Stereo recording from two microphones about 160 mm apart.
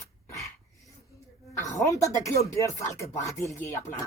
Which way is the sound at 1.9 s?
20° left (ahead or behind).